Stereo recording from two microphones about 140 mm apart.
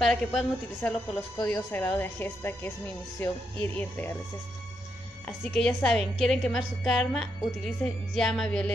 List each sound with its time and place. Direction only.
0.0 s a woman's voice: centre (ahead or behind)
1.4 s speech: 15° left (ahead or behind)
5.2 s a woman's voice: 10° left (ahead or behind)